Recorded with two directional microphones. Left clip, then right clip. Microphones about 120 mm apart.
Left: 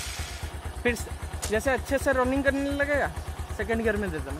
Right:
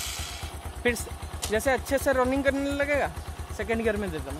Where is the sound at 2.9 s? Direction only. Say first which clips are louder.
Even; 25° right (ahead or behind).